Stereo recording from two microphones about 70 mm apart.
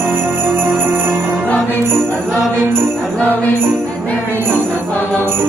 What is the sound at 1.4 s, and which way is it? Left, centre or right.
Music, left.